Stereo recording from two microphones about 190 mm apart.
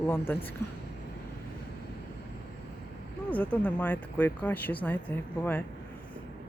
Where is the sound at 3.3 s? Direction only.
10° left (ahead or behind).